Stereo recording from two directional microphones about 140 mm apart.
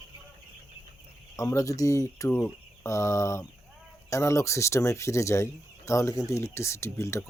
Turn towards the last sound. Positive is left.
turn(degrees=20)  # may be behind; listen again after turning